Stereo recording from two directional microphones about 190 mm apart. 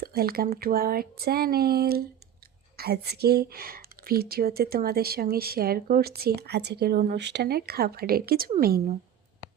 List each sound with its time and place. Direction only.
0.0 s speech: 50° right (ahead or behind)